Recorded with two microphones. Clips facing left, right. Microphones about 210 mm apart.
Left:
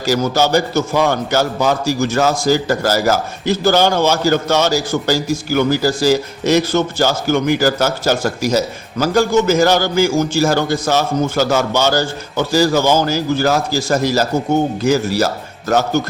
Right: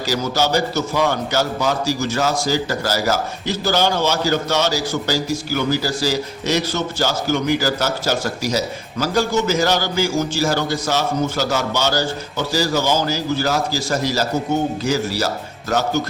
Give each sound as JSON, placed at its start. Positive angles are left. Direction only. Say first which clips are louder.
{"t": 0.0, "sound": "a man's voice", "louder": "left 5 dB", "side_deg": 50}